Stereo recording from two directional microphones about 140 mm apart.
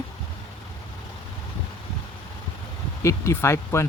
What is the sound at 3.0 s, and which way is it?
Speech, 20° left (ahead or behind).